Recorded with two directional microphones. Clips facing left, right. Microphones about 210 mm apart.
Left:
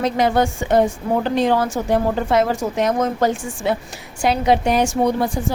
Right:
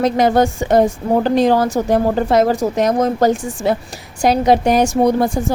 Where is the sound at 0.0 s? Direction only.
40° right (ahead or behind).